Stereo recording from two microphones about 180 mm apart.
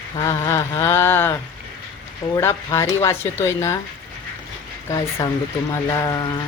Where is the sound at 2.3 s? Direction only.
15° left (ahead or behind).